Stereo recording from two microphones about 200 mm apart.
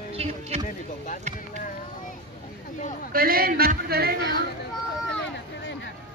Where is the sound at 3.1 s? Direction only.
45° right (ahead or behind).